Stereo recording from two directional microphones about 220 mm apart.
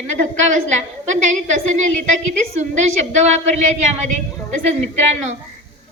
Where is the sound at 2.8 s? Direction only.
30° right (ahead or behind).